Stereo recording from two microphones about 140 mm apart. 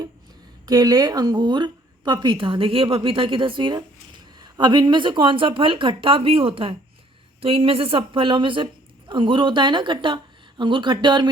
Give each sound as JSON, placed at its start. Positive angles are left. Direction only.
{"t": 0.6, "sound": "speech", "side_deg": -30}